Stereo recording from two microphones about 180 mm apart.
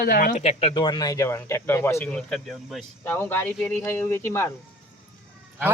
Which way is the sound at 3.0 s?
10° left (ahead or behind).